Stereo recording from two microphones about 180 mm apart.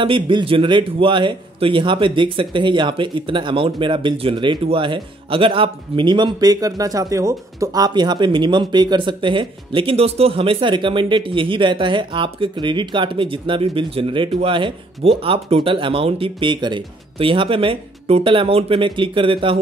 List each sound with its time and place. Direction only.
0.0 s a man's voice: 25° right (ahead or behind)